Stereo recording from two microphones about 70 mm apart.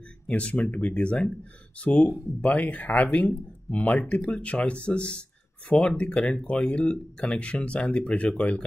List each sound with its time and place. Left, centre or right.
0.3 s speech: centre